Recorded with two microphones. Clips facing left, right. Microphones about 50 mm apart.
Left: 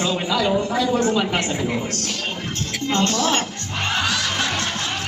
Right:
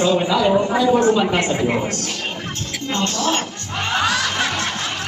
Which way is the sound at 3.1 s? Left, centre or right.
Right.